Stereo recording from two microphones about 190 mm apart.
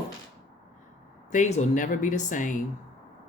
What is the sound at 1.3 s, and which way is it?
Speech, 40° left (ahead or behind).